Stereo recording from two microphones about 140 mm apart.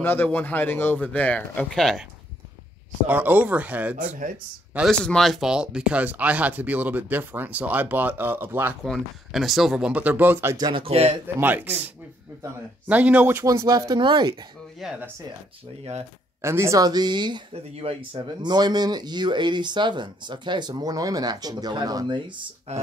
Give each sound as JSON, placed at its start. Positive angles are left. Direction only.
{"t": 0.0, "sound": "a man's voice", "side_deg": 15}
{"t": 3.1, "sound": "speech", "side_deg": -10}
{"t": 5.0, "sound": "speech", "side_deg": 5}
{"t": 8.8, "sound": "speech", "side_deg": 0}
{"t": 10.6, "sound": "speech", "side_deg": -40}
{"t": 11.3, "sound": "speech", "side_deg": -15}
{"t": 14.8, "sound": "speech", "side_deg": -5}
{"t": 16.3, "sound": "speech", "side_deg": -20}
{"t": 17.7, "sound": "speech", "side_deg": -45}
{"t": 18.4, "sound": "speech", "side_deg": -30}
{"t": 22.7, "sound": "speech", "side_deg": -50}